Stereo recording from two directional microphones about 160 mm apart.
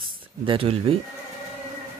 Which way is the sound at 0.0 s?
35° right (ahead or behind).